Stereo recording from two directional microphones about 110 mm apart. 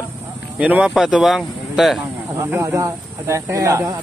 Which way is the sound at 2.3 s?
25° right (ahead or behind).